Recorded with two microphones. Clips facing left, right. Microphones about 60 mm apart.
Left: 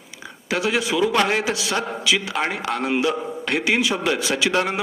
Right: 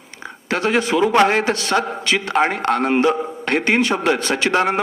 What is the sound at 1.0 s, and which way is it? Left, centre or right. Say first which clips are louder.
A man's voice: right 6 dB; right.